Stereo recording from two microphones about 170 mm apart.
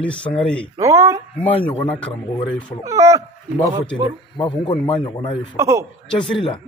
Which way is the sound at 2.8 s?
20° right (ahead or behind).